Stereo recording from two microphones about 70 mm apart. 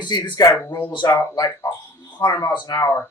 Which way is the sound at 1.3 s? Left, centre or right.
Left.